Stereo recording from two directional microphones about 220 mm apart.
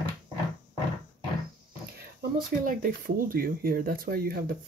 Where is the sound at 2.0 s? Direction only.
40° right (ahead or behind).